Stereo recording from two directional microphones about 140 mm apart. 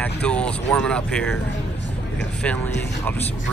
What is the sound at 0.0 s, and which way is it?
Speech, 10° left (ahead or behind).